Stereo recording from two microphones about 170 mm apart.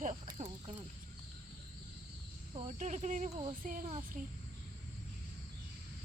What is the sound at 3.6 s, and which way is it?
Speech, 50° right (ahead or behind).